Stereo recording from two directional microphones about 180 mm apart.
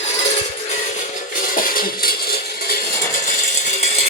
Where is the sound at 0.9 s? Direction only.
45° left (ahead or behind).